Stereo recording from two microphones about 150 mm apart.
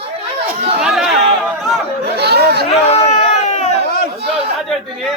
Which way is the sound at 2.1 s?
90° right.